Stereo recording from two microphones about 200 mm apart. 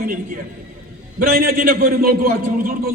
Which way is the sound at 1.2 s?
50° right (ahead or behind).